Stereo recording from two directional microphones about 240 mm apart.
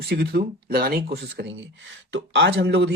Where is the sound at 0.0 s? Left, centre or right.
Right.